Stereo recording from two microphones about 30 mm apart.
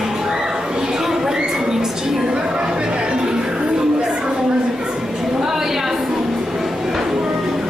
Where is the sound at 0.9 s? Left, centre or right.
Centre.